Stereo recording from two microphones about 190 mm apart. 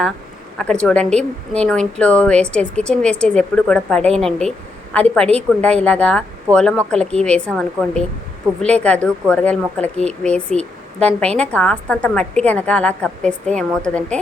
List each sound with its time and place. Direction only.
0.6 s a woman's voice: 5° left (ahead or behind)